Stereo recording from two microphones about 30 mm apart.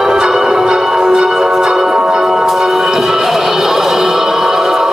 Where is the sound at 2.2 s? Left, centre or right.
Centre.